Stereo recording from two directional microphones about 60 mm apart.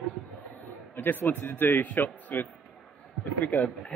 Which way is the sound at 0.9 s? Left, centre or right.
Left.